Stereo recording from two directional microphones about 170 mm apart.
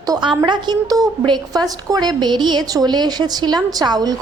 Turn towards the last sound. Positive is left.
turn(degrees=-25)  # may be behind; listen again after turning